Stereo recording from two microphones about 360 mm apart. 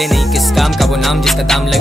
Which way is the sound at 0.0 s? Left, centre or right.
Centre.